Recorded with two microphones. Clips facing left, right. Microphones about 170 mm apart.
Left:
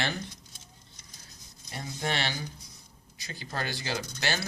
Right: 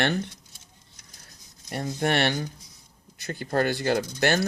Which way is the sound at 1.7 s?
55° right (ahead or behind).